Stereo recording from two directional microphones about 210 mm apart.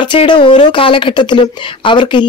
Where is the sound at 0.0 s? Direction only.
20° left (ahead or behind).